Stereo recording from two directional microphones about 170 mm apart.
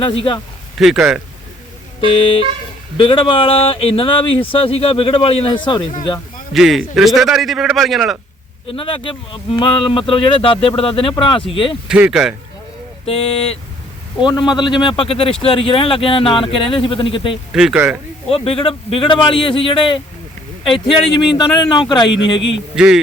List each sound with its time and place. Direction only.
0.0 s speech: 30° left (ahead or behind)
0.8 s a man's voice: centre (ahead or behind)
2.0 s speech: 30° left (ahead or behind)
6.5 s a man's voice: centre (ahead or behind)
8.7 s speech: 30° left (ahead or behind)
11.9 s a man's voice: 5° right (ahead or behind)
13.1 s speech: 35° left (ahead or behind)
17.5 s a man's voice: 5° right (ahead or behind)
18.3 s speech: 35° left (ahead or behind)
22.4 s speech: 90° left
22.7 s a man's voice: 5° right (ahead or behind)